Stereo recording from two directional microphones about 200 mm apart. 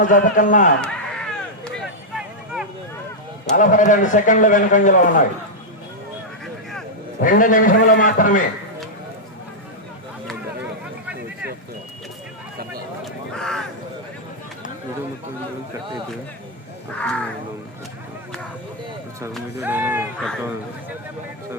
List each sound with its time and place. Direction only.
0.0 s a man's voice: 40° left (ahead or behind)
0.8 s a sound: 5° left (ahead or behind)
3.5 s a man's voice: 40° left (ahead or behind)
7.2 s a man's voice: 40° left (ahead or behind)
13.3 s a sound: 5° left (ahead or behind)
16.9 s crow: 5° left (ahead or behind)
19.5 s speech: 10° right (ahead or behind)